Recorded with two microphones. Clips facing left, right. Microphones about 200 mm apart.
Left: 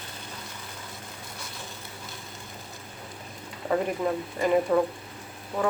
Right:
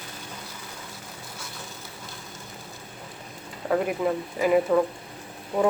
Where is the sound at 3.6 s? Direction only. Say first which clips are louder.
Right 2 dB; centre (ahead or behind).